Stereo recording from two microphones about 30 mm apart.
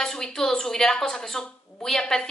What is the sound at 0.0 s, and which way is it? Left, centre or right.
A woman's voice, centre.